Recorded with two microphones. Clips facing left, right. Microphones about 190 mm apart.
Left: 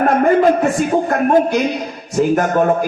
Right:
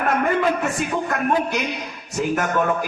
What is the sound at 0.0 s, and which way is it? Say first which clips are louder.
A man's voice: left 8 dB; 40° left (ahead or behind).